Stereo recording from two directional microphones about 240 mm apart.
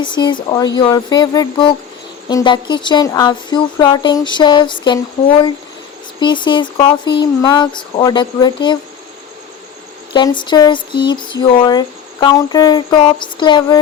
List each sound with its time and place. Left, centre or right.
0.0 s speech: centre
10.1 s speech: centre